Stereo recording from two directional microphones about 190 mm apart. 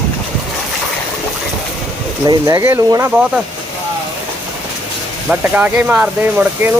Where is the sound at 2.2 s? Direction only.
20° right (ahead or behind).